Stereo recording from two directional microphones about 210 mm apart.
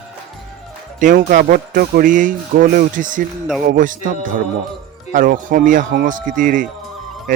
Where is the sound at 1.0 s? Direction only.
40° right (ahead or behind).